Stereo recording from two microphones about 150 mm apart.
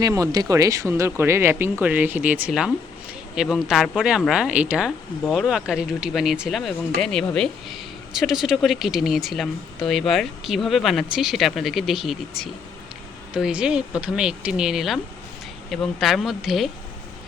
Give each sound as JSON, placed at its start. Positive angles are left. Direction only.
{"t": 0.0, "sound": "speech", "side_deg": -25}